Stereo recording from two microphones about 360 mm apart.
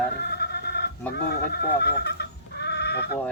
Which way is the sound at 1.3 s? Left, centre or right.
Left.